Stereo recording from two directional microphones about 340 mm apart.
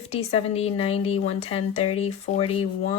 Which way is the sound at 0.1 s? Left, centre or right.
Centre.